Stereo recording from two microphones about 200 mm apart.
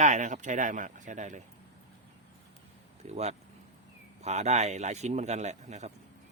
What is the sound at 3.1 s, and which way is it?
Speech, 35° right (ahead or behind).